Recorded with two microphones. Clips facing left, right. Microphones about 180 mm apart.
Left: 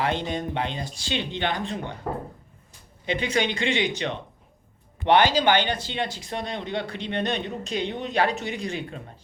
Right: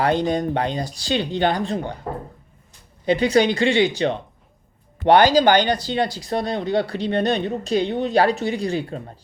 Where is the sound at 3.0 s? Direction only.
35° right (ahead or behind).